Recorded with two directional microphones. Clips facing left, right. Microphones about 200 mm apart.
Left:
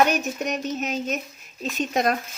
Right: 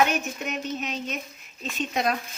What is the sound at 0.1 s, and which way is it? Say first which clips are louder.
A woman's voice: left 4 dB; 40° left (ahead or behind).